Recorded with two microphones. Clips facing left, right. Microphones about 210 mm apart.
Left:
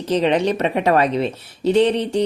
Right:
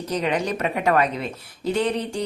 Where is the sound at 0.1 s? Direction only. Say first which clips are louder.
Left 7 dB; 30° left (ahead or behind).